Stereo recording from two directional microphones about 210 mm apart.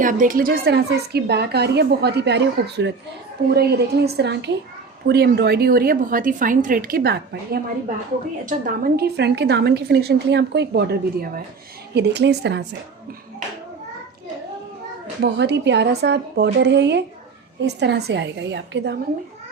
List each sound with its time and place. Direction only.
0.0 s a woman's voice: 40° right (ahead or behind); by 12.6 s 55° right (ahead or behind)
15.2 s speech: 55° right (ahead or behind)